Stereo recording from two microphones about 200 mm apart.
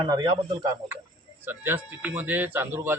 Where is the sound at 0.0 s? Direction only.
20° right (ahead or behind).